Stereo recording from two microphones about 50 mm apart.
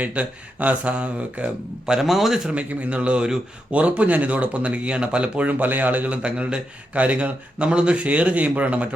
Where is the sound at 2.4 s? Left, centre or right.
Right.